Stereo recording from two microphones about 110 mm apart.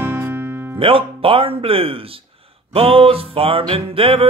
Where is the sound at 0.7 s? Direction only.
55° right (ahead or behind).